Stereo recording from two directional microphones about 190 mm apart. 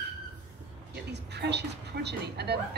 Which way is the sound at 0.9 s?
60° right (ahead or behind).